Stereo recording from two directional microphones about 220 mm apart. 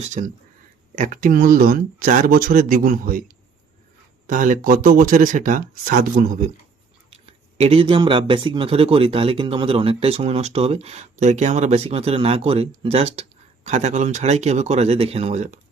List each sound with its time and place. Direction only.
0.0 s speech: 35° right (ahead or behind)
4.3 s speech: 35° right (ahead or behind)
7.3 s speech: 25° right (ahead or behind)